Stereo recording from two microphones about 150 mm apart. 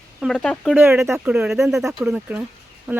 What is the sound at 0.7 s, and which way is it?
Speech, 15° right (ahead or behind).